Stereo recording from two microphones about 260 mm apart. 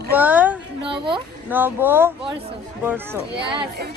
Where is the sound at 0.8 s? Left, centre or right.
Centre.